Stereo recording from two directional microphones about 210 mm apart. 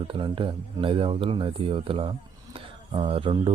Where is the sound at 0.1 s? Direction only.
25° right (ahead or behind).